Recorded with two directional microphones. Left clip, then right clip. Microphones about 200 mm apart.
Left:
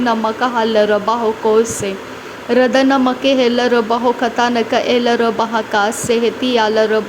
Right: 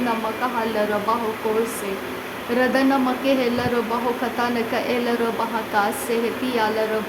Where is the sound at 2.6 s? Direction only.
35° left (ahead or behind).